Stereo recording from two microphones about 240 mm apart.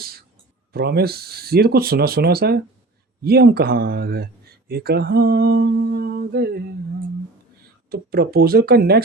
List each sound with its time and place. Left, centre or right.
0.7 s speech: right
7.9 s speech: right